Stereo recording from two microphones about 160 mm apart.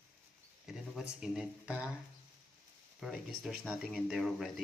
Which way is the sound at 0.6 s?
5° right (ahead or behind).